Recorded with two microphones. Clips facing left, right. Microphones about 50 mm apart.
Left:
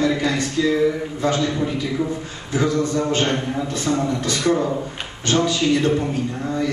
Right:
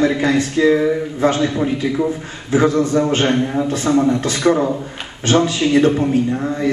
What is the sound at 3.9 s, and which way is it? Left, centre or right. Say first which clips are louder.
Speech: right 7 dB; centre.